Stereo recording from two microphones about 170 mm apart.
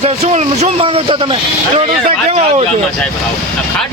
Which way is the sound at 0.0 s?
40° right (ahead or behind).